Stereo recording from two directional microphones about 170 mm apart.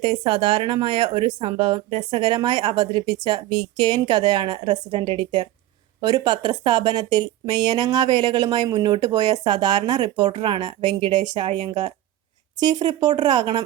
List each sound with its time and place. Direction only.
0.0 s speech: 30° right (ahead or behind)